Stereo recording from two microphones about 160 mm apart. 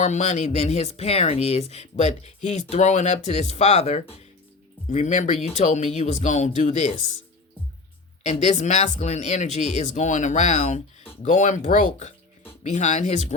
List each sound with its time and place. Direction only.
0.0 s speech: 45° left (ahead or behind)
8.2 s speech: 45° left (ahead or behind)